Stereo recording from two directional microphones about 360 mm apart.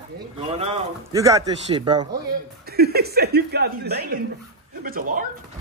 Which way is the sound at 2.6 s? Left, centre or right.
Right.